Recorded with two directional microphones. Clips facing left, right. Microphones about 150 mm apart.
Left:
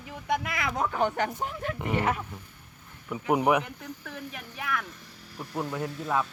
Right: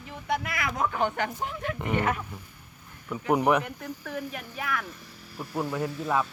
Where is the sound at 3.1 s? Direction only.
10° left (ahead or behind).